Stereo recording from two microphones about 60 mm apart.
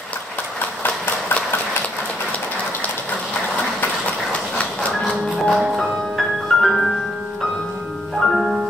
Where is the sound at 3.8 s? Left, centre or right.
Left.